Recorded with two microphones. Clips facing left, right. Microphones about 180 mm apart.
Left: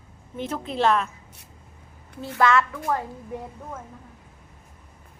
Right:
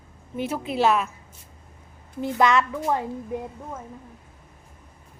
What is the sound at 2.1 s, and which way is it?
Speech, 15° right (ahead or behind).